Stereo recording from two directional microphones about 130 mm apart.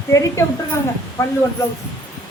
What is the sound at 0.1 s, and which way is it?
Speech, 25° left (ahead or behind).